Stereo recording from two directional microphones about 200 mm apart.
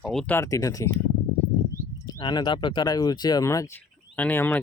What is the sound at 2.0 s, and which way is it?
Speech, 20° left (ahead or behind).